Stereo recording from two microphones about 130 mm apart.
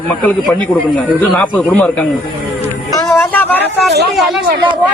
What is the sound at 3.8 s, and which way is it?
Speech, centre (ahead or behind).